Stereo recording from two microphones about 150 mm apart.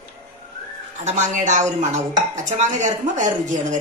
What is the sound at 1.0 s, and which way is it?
A woman's voice, 50° right (ahead or behind).